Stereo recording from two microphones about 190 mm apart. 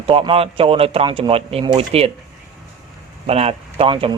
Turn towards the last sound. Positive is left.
turn(degrees=-30)  # may be behind; listen again after turning